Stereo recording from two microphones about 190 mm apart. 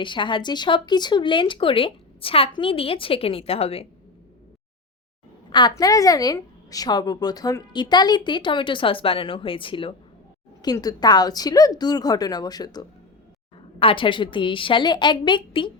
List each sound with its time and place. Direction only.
0.0 s a woman's voice: 25° left (ahead or behind)
5.5 s a woman's voice: 25° left (ahead or behind)